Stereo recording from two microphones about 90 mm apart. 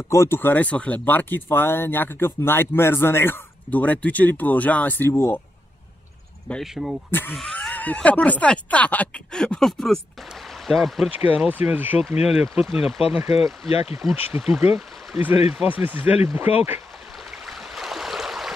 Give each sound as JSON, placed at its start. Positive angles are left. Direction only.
{"t": 0.1, "sound": "speech", "side_deg": 30}
{"t": 6.6, "sound": "speech", "side_deg": -5}
{"t": 7.1, "sound": "speech", "side_deg": 25}
{"t": 11.1, "sound": "speech", "side_deg": -15}
{"t": 12.2, "sound": "speech", "side_deg": -10}
{"t": 13.3, "sound": "speech", "side_deg": 90}
{"t": 14.1, "sound": "speech", "side_deg": -20}
{"t": 17.5, "sound": "a sound", "side_deg": -5}